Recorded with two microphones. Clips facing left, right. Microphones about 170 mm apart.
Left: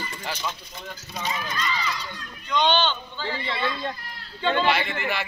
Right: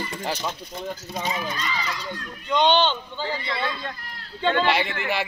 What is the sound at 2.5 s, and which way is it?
Speech, 25° right (ahead or behind).